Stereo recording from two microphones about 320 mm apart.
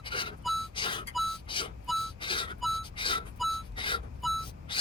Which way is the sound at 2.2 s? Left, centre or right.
Centre.